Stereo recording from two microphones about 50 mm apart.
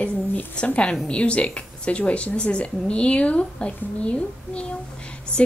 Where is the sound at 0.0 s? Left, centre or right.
Left.